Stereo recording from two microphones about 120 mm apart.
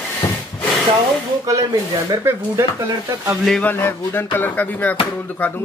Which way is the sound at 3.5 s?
10° left (ahead or behind).